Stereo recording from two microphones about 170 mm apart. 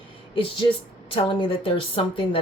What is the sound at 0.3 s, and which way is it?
A woman's voice, 30° left (ahead or behind).